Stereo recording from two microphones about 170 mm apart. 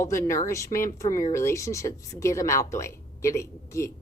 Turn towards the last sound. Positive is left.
turn(degrees=15)  # may be behind; listen again after turning